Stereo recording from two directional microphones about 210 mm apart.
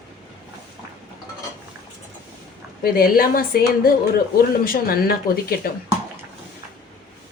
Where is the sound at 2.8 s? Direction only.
45° left (ahead or behind).